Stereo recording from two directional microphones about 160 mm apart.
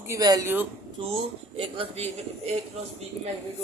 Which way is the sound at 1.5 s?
35° right (ahead or behind).